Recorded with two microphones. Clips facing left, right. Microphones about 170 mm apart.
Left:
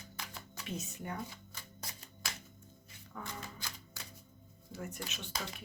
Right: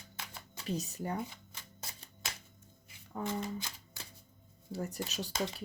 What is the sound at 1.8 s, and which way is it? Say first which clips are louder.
Shuffling cards: even; 25° right (ahead or behind).